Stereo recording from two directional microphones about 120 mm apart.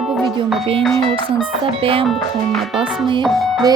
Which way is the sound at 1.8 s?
50° right (ahead or behind).